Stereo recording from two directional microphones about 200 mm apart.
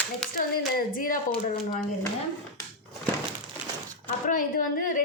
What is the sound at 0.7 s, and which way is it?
Speech, 45° left (ahead or behind).